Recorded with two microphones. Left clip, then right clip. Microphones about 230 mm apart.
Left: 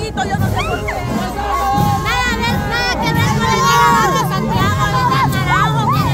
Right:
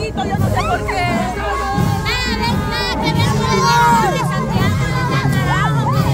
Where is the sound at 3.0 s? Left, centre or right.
Left.